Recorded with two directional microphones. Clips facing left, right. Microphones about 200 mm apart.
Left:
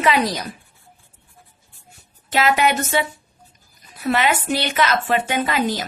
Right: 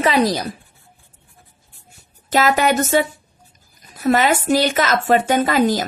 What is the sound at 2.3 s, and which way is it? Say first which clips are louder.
Speech: right 2 dB; 40° right (ahead or behind).